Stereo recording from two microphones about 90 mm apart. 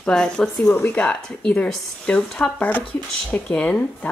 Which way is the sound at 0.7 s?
20° left (ahead or behind).